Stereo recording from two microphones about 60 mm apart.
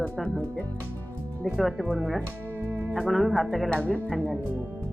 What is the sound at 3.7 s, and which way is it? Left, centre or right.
Speech, left.